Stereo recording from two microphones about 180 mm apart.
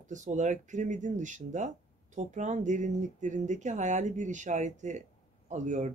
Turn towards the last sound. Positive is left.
turn(degrees=-40)  # may be behind; listen again after turning